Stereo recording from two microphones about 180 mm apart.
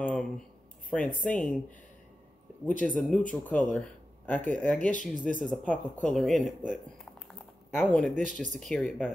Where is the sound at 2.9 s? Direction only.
Centre (ahead or behind).